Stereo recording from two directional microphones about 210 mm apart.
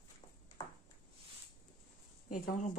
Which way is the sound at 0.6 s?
15° left (ahead or behind).